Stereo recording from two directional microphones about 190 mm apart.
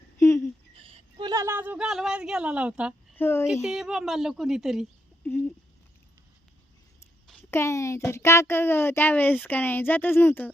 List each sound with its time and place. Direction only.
0.2 s a sound: 15° left (ahead or behind)
0.7 s speech: 30° right (ahead or behind); by 3.2 s 5° right (ahead or behind)
3.2 s speech: 10° left (ahead or behind)
3.6 s a woman's voice: centre (ahead or behind)
5.3 s a child's voice: 10° left (ahead or behind)
7.5 s a child's voice: 15° left (ahead or behind)